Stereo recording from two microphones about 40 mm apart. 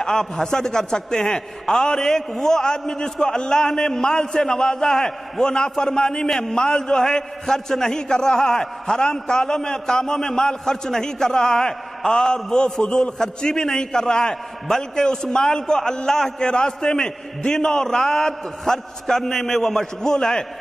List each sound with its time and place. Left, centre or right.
0.0 s a man's voice: centre